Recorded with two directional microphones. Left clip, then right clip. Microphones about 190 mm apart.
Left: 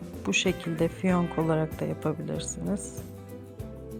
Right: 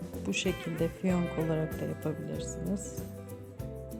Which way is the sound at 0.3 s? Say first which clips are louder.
Left 6 dB; 10° left (ahead or behind).